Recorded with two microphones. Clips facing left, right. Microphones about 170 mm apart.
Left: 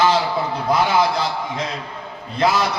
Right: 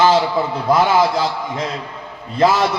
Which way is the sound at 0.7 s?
50° right (ahead or behind).